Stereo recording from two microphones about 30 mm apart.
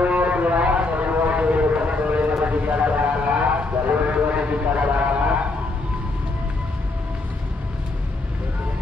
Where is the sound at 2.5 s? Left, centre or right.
Right.